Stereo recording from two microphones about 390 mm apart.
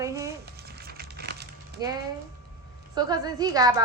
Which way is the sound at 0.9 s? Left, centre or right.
Right.